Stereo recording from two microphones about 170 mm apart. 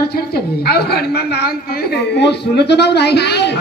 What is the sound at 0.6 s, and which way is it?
Speech, 70° left (ahead or behind).